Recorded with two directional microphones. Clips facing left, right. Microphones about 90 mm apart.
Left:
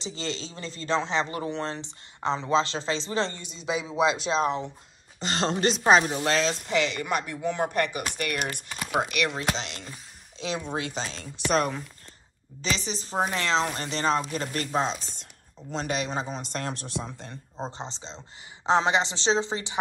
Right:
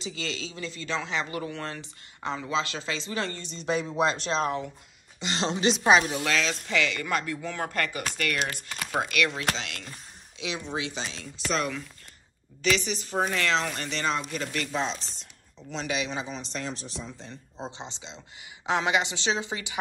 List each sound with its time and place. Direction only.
0.0 s speech: 30° left (ahead or behind)
3.4 s speech: 5° left (ahead or behind)
4.4 s speech: 25° left (ahead or behind)
5.2 s speech: 45° left (ahead or behind); by 9.1 s 15° left (ahead or behind)
9.6 s speech: 30° left (ahead or behind)
10.4 s a man's voice: 45° left (ahead or behind)
11.3 s speech: 60° left (ahead or behind)
12.6 s a man's voice: 30° left (ahead or behind); by 17.4 s 60° left (ahead or behind)
17.6 s speech: 40° left (ahead or behind)